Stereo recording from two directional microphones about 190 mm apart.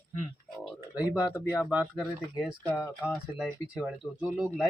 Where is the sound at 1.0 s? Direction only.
20° left (ahead or behind).